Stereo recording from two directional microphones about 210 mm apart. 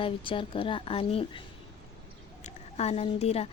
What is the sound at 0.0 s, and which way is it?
A woman's voice, 25° left (ahead or behind).